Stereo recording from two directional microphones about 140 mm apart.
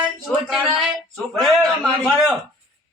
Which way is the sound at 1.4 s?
Centre (ahead or behind).